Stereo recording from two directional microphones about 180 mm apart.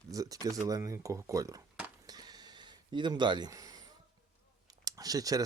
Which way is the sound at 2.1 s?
20° right (ahead or behind).